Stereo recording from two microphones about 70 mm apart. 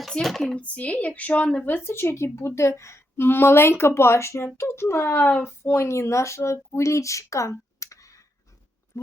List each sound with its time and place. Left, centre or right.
0.1 s speech: centre
0.5 s speech: centre
1.8 s speech: left
5.0 s speech: left